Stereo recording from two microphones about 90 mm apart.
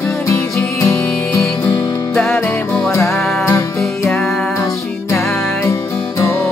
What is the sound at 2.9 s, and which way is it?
Music, 35° left (ahead or behind).